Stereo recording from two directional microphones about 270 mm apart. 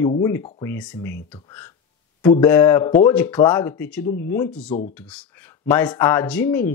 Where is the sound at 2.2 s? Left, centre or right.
Centre.